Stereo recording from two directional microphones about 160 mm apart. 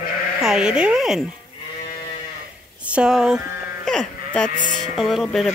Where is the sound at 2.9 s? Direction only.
5° right (ahead or behind).